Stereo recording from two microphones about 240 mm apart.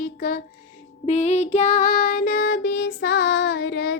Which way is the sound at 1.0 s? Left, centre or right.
Left.